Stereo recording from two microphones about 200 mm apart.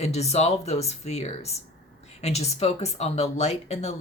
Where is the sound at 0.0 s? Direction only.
35° left (ahead or behind).